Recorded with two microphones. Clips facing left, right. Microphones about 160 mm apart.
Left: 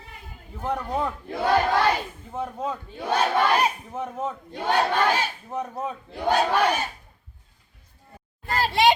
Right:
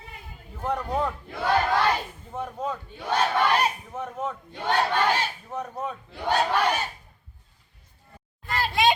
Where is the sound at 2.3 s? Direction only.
5° left (ahead or behind).